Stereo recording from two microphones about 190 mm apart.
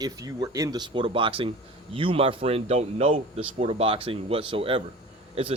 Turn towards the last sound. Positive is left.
turn(degrees=-30)  # may be behind; listen again after turning